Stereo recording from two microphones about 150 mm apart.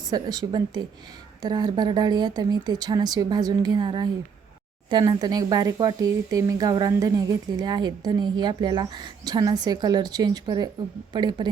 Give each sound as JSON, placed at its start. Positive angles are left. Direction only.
{"t": 0.1, "sound": "a woman's voice", "side_deg": -25}